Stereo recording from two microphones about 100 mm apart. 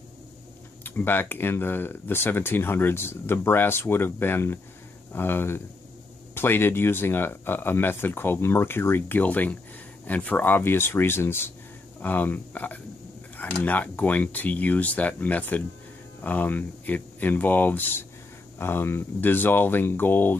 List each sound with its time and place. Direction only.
0.8 s speech: 20° left (ahead or behind)